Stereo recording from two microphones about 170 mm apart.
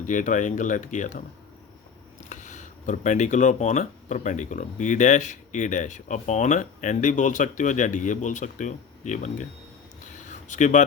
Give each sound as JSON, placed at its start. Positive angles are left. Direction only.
{"t": 0.0, "sound": "speech", "side_deg": 45}
{"t": 2.3, "sound": "speech", "side_deg": 45}
{"t": 10.2, "sound": "a sound", "side_deg": 45}